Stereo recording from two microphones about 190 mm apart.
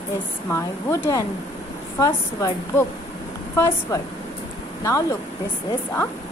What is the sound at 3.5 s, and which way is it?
Speech, 15° left (ahead or behind).